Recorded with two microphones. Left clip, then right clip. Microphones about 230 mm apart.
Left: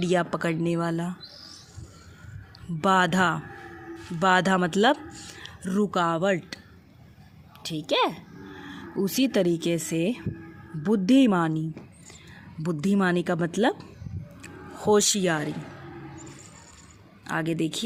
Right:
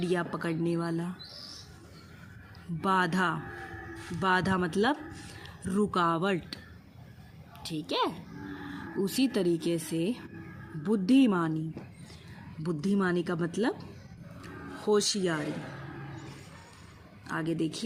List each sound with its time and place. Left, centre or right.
0.0 s speech: left
2.8 s speech: left
7.6 s speech: left
12.6 s speech: left
14.4 s music: left
17.2 s speech: left